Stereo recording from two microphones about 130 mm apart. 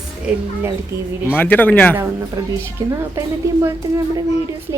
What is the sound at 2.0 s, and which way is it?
A woman's voice, 25° right (ahead or behind).